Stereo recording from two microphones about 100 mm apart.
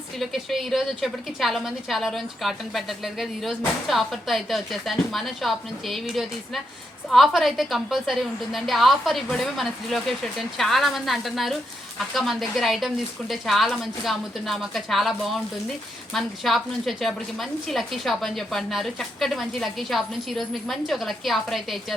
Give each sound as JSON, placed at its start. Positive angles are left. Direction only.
{"t": 0.2, "sound": "a woman's voice", "side_deg": 0}